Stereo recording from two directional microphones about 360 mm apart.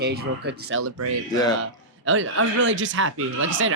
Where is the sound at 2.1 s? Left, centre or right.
Right.